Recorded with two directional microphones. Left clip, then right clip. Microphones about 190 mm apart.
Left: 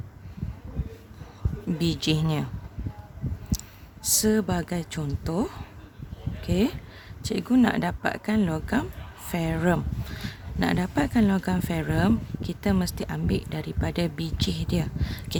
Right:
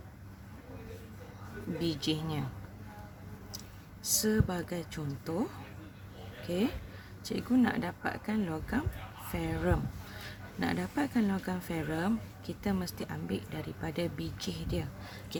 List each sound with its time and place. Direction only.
1.8 s speech: 50° left (ahead or behind)
4.0 s speech: 45° left (ahead or behind)